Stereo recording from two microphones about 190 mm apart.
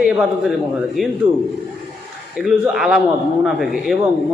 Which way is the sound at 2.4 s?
Centre (ahead or behind).